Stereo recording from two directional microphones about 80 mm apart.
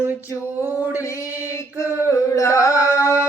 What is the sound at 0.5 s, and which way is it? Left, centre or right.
Music, right.